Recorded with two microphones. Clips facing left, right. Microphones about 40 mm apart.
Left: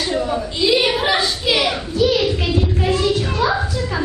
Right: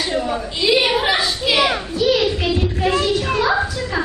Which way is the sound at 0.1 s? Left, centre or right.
Centre.